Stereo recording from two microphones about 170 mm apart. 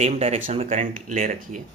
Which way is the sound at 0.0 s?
40° right (ahead or behind).